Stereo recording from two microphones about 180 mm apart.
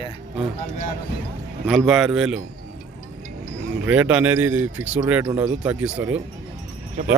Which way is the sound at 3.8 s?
10° right (ahead or behind).